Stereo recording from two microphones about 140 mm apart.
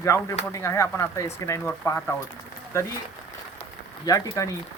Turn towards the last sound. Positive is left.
turn(degrees=25)  # may be behind; listen again after turning